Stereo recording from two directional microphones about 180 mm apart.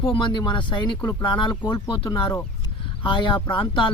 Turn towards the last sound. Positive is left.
turn(degrees=30)  # may be behind; listen again after turning